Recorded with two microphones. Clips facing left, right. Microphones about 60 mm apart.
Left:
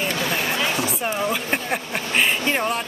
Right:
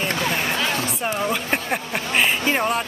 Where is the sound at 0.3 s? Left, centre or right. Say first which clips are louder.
Even; centre.